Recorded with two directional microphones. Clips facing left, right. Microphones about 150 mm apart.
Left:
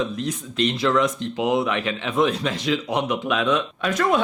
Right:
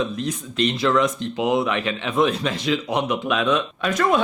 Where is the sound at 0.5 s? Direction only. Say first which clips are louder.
Right 1 dB; 15° right (ahead or behind).